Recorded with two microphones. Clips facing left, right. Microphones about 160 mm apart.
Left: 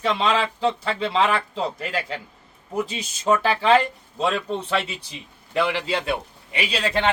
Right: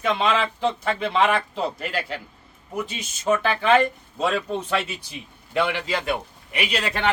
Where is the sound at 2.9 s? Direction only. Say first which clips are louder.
Even; 30° left (ahead or behind).